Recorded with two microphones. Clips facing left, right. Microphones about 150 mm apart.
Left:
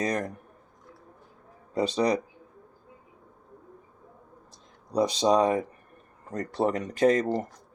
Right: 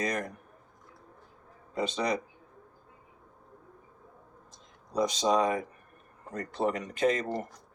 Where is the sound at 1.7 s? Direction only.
35° left (ahead or behind).